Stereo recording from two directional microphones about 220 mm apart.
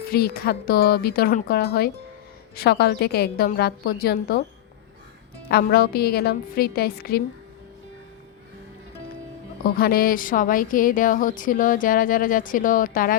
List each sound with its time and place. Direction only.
0.0 s a woman's voice: 45° left (ahead or behind)
5.5 s a woman's voice: 45° left (ahead or behind)
9.6 s speech: 45° left (ahead or behind)